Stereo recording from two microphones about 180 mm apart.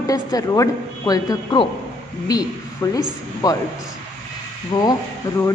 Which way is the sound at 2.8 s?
20° left (ahead or behind).